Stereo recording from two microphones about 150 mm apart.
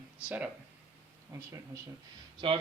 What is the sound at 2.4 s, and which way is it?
Speech, 35° right (ahead or behind).